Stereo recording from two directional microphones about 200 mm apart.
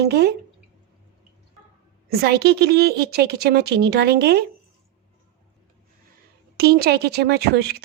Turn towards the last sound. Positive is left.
turn(degrees=-55)  # may be behind; listen again after turning